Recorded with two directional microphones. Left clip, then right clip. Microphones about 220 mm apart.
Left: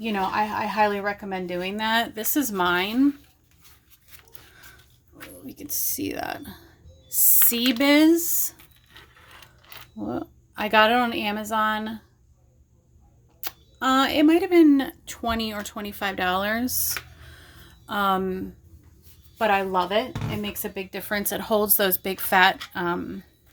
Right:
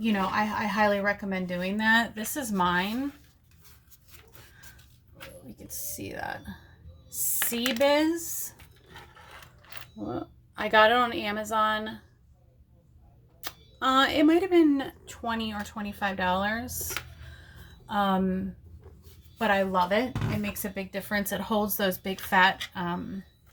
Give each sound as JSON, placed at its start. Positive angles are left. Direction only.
{"t": 0.0, "sound": "speech", "side_deg": 40}
{"t": 5.6, "sound": "speech", "side_deg": 45}
{"t": 7.8, "sound": "speech", "side_deg": 45}
{"t": 10.0, "sound": "a woman's voice", "side_deg": 20}
{"t": 13.4, "sound": "a woman's voice", "side_deg": 15}